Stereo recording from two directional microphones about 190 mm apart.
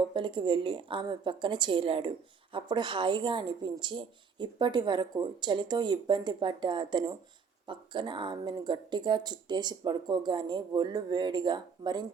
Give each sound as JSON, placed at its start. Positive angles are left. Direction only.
{"t": 0.1, "sound": "a woman's voice", "side_deg": -25}